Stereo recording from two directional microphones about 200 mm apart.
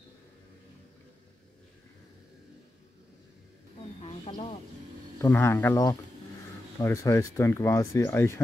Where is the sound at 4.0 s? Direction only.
30° left (ahead or behind).